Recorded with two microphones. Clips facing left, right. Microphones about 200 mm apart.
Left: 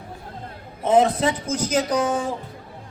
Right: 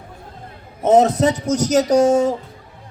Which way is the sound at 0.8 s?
45° right (ahead or behind).